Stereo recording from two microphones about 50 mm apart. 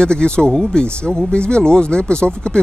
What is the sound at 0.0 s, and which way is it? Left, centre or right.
Speech, centre.